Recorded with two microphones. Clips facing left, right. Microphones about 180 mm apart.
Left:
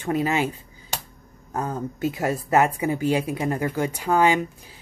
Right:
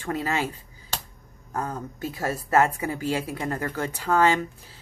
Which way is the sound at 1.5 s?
20° left (ahead or behind).